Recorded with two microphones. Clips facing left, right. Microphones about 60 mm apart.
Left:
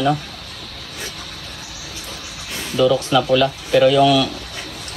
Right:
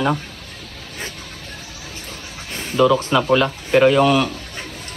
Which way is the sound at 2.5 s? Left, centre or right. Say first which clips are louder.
Right 1 dB; right.